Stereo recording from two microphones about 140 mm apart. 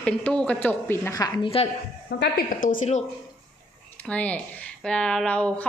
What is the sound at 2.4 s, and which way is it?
Speech, 90° left.